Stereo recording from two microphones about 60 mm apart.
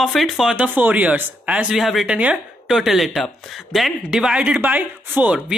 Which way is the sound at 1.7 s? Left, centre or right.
Centre.